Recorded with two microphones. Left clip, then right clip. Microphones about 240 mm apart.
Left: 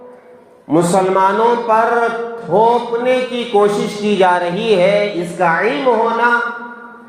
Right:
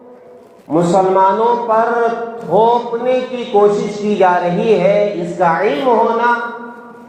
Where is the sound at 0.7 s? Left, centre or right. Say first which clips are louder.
Right 1 dB; left.